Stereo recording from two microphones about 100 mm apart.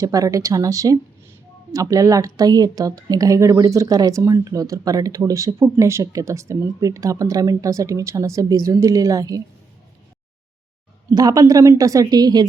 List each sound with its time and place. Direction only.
0.0 s speech: 35° right (ahead or behind)
11.1 s speech: 35° right (ahead or behind)